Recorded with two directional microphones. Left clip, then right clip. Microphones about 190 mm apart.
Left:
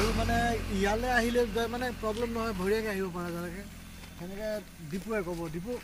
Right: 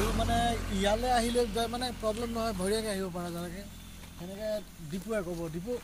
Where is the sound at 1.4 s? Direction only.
25° right (ahead or behind).